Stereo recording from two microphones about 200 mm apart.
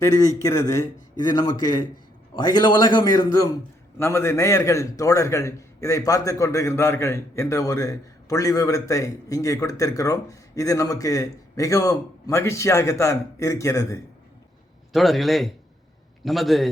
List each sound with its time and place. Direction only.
0.0 s a man's voice: 15° left (ahead or behind)
14.9 s a man's voice: centre (ahead or behind)